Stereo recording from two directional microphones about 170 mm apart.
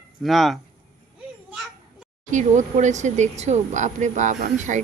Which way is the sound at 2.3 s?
45° right (ahead or behind).